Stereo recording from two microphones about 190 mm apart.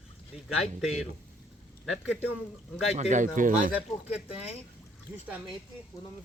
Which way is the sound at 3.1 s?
45° right (ahead or behind).